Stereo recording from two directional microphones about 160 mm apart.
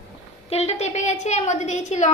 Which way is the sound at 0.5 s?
40° left (ahead or behind).